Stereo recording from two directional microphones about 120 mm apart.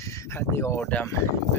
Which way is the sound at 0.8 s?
10° left (ahead or behind).